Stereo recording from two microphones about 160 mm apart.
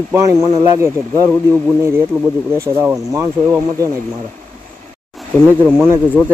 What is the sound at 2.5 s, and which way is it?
Speech, 15° right (ahead or behind).